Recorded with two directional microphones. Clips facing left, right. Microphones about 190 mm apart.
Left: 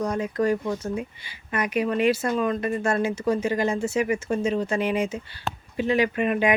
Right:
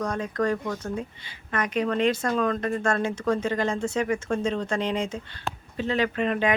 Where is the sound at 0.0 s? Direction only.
10° left (ahead or behind).